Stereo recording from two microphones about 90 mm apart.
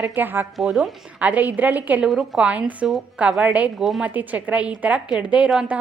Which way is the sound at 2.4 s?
15° right (ahead or behind).